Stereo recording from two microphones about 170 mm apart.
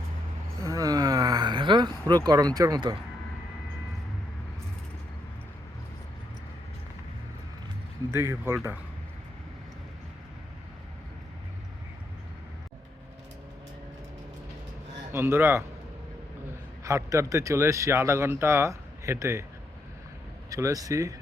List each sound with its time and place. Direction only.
0.6 s a sound: 20° right (ahead or behind)
8.1 s speech: 15° right (ahead or behind)
15.1 s a man's voice: 15° right (ahead or behind)
20.5 s speech: 20° right (ahead or behind)